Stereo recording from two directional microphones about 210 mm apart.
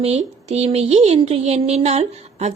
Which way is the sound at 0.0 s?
30° right (ahead or behind).